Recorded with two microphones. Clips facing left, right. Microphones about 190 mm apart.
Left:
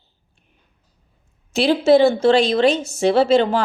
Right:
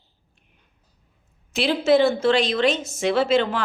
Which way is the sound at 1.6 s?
30° left (ahead or behind).